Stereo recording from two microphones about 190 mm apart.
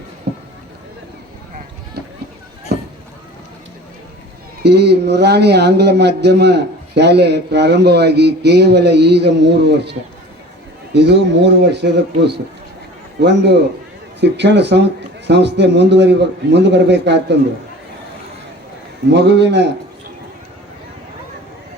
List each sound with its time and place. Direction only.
0.3 s rowboat: 60° right (ahead or behind)
2.7 s a sound: 60° right (ahead or behind)
4.6 s a man's voice: 60° right (ahead or behind)
10.9 s a man's voice: 60° right (ahead or behind)
19.1 s a man's voice: 65° right (ahead or behind)